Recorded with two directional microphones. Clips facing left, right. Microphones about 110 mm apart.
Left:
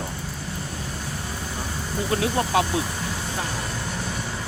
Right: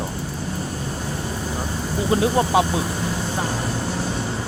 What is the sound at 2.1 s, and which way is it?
Speech, 25° right (ahead or behind).